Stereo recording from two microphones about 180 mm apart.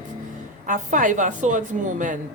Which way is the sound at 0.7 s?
45° right (ahead or behind).